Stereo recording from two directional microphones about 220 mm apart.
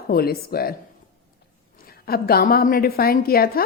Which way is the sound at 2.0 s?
45° left (ahead or behind).